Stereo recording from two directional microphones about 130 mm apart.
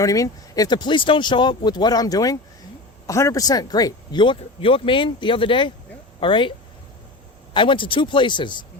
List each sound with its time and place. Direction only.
0.0 s speech: 25° left (ahead or behind)
7.5 s speech: 40° left (ahead or behind)